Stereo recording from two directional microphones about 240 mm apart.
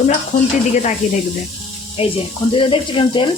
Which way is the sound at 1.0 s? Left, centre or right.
Left.